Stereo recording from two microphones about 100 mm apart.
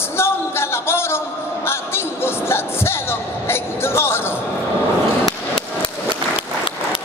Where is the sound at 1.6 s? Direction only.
25° left (ahead or behind).